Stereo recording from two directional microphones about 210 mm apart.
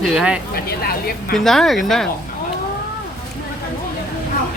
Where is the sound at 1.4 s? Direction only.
Centre (ahead or behind).